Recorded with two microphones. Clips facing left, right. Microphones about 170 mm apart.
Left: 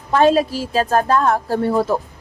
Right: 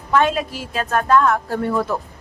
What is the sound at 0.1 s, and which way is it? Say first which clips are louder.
A woman's voice: left 4 dB; 35° left (ahead or behind).